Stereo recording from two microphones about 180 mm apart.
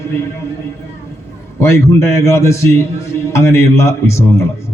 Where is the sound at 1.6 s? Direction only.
15° left (ahead or behind).